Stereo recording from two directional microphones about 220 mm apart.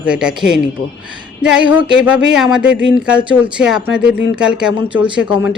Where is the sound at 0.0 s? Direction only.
5° right (ahead or behind).